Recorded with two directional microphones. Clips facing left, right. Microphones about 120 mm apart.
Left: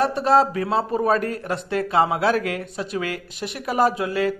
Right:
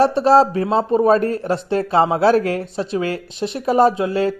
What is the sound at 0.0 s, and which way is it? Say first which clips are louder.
Speech: right 5 dB; 30° right (ahead or behind).